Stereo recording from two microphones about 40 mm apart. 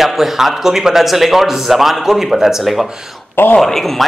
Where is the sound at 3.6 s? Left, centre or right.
Centre.